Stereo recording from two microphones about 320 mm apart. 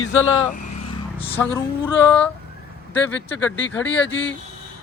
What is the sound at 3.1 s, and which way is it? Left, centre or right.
Speech, left.